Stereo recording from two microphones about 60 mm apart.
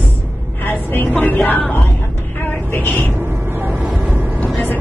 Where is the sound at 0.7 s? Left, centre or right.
Left.